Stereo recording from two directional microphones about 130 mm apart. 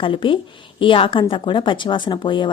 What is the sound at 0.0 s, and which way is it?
A woman's voice, 40° left (ahead or behind).